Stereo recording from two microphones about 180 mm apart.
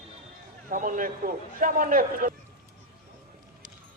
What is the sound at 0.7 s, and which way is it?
A man's voice, 45° right (ahead or behind).